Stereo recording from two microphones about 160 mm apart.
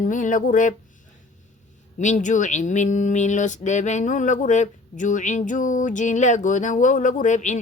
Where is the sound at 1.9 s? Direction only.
50° left (ahead or behind).